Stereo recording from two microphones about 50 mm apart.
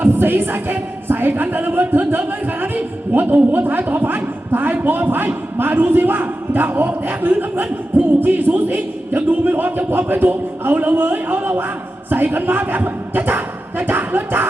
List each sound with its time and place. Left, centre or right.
0.0 s speech: right
3.5 s music: right